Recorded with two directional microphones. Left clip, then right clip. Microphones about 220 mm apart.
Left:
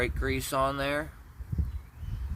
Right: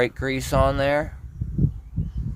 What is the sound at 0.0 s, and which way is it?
Speech, 40° right (ahead or behind).